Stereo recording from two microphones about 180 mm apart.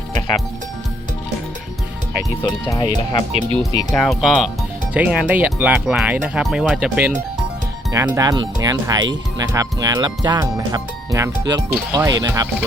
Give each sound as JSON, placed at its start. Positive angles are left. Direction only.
{"t": 2.4, "sound": "speech", "side_deg": 25}
{"t": 3.6, "sound": "speech", "side_deg": 0}
{"t": 7.9, "sound": "speech", "side_deg": -15}